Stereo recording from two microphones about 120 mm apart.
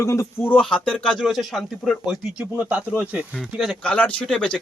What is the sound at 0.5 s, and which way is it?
Speech, 10° left (ahead or behind).